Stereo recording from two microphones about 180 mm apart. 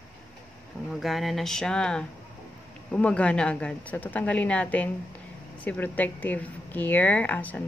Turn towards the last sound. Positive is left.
turn(degrees=10)  # may be behind; listen again after turning